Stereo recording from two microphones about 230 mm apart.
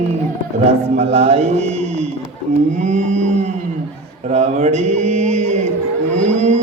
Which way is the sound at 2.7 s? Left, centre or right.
Right.